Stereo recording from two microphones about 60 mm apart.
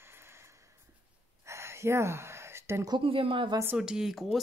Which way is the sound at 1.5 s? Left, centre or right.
Right.